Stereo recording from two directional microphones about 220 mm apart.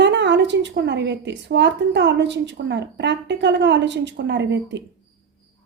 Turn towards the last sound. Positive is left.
turn(degrees=-55)  # may be behind; listen again after turning